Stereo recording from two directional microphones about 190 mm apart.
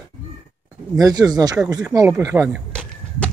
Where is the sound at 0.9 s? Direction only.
20° right (ahead or behind).